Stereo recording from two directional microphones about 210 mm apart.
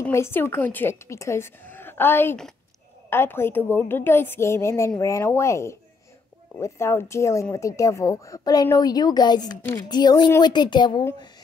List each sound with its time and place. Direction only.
0.0 s a woman's voice: 10° left (ahead or behind)